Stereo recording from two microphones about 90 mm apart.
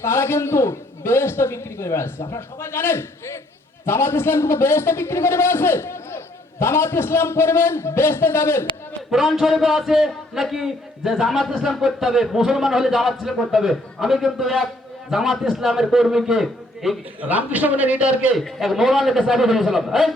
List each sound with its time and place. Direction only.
0.0 s a man's voice: 25° left (ahead or behind)
9.0 s a man's voice: 5° right (ahead or behind)
17.2 s a man's voice: 15° right (ahead or behind)
18.3 s a man's voice: centre (ahead or behind)